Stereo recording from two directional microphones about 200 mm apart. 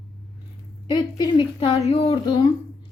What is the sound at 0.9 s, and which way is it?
A woman's voice, 20° left (ahead or behind).